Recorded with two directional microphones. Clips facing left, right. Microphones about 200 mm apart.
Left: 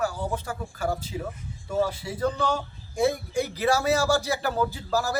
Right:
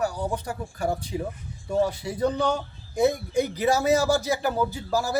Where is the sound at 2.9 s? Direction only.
20° right (ahead or behind).